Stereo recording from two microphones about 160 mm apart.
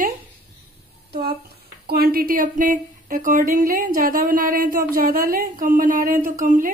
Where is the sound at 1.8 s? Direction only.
75° right (ahead or behind); by 6.7 s 55° right (ahead or behind).